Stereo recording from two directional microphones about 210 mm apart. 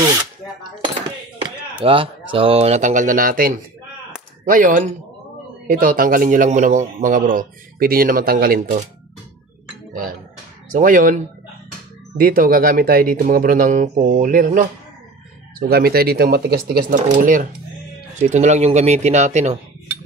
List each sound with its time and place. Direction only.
0.0 s a sound: 20° right (ahead or behind)
1.9 s a man's voice: 25° right (ahead or behind)
10.7 s a man's voice: 40° right (ahead or behind)
15.7 s a man's voice: 45° right (ahead or behind)